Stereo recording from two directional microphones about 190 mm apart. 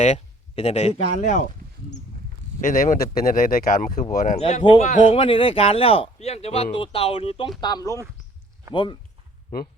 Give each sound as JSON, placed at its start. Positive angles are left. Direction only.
{"t": 0.0, "sound": "speech", "side_deg": 35}
{"t": 2.6, "sound": "speech", "side_deg": 45}